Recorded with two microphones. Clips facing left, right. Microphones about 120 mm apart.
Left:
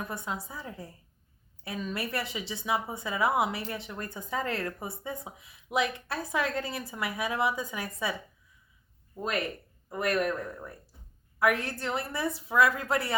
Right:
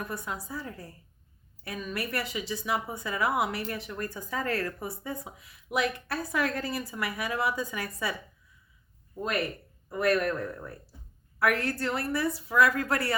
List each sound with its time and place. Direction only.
0.0 s a woman's voice: 25° left (ahead or behind)
9.9 s a woman's voice: 15° left (ahead or behind)